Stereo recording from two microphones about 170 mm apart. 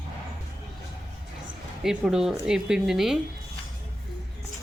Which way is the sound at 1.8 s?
5° right (ahead or behind).